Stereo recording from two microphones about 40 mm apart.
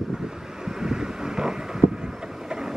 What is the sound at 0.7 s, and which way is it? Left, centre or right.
Vehicle, centre.